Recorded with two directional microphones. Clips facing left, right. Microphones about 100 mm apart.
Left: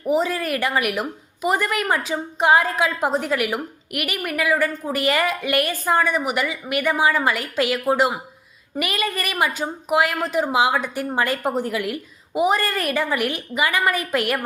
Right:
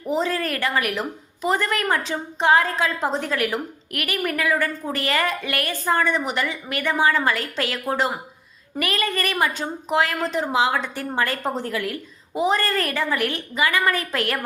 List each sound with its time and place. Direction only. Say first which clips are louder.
0.0 s a woman's voice: left 2 dB; 10° left (ahead or behind)